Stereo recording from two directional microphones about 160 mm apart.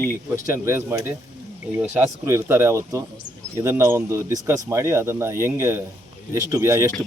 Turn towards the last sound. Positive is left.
turn(degrees=-15)  # may be behind; listen again after turning